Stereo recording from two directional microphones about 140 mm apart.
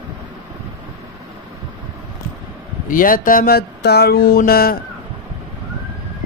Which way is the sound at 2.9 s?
85° left.